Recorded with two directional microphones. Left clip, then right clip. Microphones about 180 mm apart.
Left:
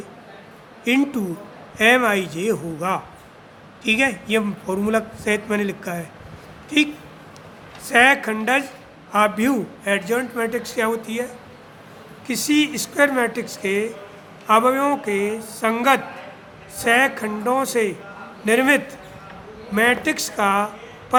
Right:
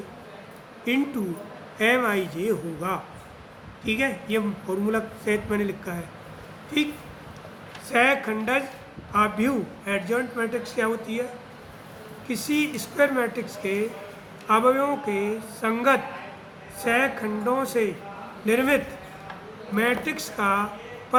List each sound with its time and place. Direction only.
0.9 s a man's voice: 50° left (ahead or behind)
12.3 s a man's voice: 55° left (ahead or behind)
21.1 s a sound: 55° left (ahead or behind)